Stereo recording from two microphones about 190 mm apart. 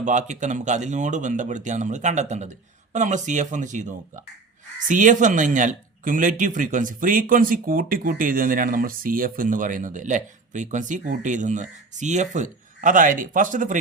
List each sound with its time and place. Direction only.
0.0 s speech: 40° right (ahead or behind)